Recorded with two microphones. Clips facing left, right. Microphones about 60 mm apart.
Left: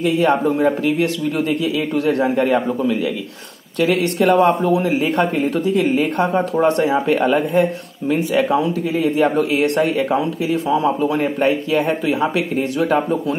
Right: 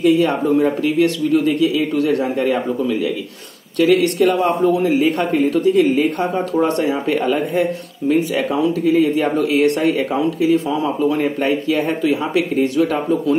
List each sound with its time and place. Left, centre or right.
0.0 s speech: left
8.1 s speech: left